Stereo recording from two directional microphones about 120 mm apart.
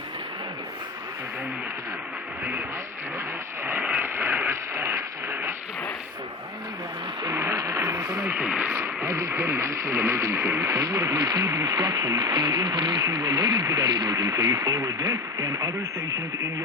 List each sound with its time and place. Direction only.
2.4 s vehicle: 15° right (ahead or behind)
3.6 s a sound: 15° right (ahead or behind)
7.2 s speech: 25° right (ahead or behind)